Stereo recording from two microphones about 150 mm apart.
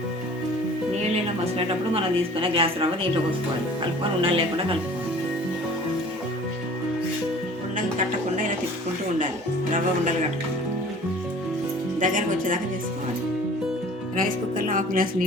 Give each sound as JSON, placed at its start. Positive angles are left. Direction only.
{"t": 1.1, "sound": "a woman's voice", "side_deg": -40}
{"t": 4.2, "sound": "a woman's voice", "side_deg": -35}
{"t": 7.8, "sound": "music", "side_deg": -60}
{"t": 11.9, "sound": "speech", "side_deg": -60}
{"t": 14.2, "sound": "speech", "side_deg": -65}